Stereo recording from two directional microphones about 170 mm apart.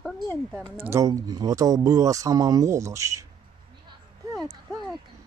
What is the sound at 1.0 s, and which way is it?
Speech, 20° right (ahead or behind).